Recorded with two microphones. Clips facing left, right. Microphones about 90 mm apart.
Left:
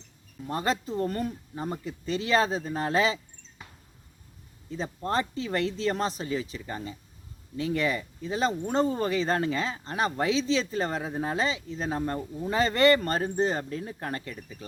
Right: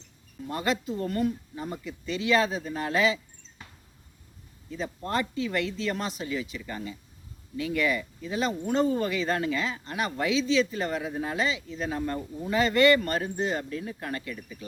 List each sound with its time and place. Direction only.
0.4 s speech: 35° left (ahead or behind)
4.7 s speech: 35° left (ahead or behind)